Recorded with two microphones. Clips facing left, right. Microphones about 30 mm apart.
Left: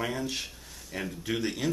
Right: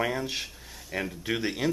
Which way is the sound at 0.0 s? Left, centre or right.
Centre.